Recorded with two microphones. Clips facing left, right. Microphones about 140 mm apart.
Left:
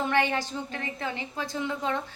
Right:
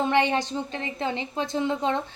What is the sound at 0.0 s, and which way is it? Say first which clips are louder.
A woman's voice: right 4 dB; 20° right (ahead or behind).